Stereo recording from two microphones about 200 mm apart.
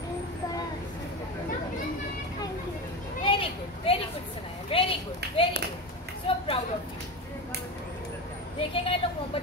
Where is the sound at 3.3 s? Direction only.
25° left (ahead or behind).